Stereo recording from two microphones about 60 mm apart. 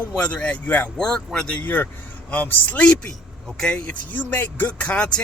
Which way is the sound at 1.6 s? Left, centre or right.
Left.